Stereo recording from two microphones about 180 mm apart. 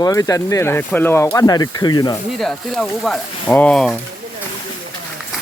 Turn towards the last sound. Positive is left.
turn(degrees=5)  # may be behind; listen again after turning